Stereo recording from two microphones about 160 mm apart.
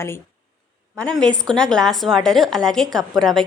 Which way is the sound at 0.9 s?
5° left (ahead or behind).